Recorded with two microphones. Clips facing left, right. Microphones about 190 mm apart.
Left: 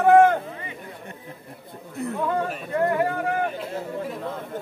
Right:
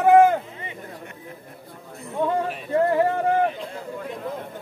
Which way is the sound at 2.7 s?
30° right (ahead or behind).